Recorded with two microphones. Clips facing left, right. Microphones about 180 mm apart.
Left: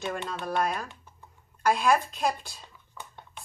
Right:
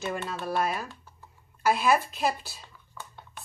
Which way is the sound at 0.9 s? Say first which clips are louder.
Right 3 dB; 20° left (ahead or behind).